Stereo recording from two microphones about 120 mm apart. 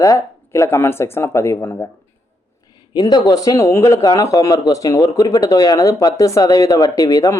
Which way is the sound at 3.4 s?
25° left (ahead or behind).